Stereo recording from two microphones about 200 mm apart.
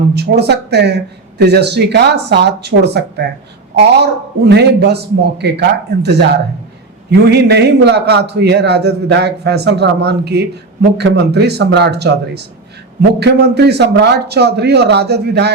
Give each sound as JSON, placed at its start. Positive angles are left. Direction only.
{"t": 0.1, "sound": "a man's voice", "side_deg": -55}